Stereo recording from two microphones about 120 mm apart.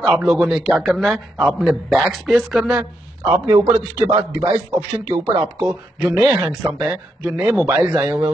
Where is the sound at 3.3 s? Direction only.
15° right (ahead or behind).